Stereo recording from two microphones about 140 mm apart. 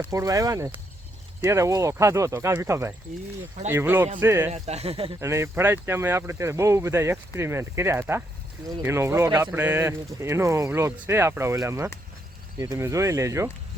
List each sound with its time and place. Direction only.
0.0 s speech: 20° right (ahead or behind)
4.5 s speech: 50° right (ahead or behind)
5.2 s speech: 20° right (ahead or behind)